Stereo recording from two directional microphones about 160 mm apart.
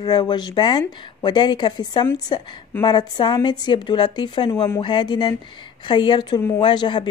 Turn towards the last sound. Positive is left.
turn(degrees=30)  # may be behind; listen again after turning